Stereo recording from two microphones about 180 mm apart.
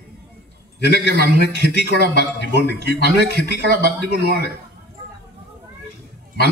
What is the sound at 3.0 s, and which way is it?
A man's voice, 60° right (ahead or behind).